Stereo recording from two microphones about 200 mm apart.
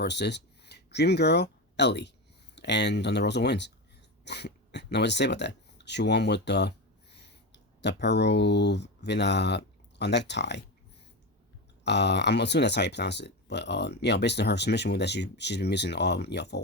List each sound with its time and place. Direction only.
0.0 s speech: 60° left (ahead or behind)
11.8 s speech: 60° left (ahead or behind)